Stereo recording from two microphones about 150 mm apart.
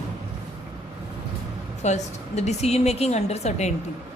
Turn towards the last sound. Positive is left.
turn(degrees=45)  # may be behind; listen again after turning